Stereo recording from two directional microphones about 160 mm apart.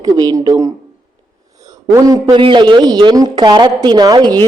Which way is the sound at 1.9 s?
25° right (ahead or behind).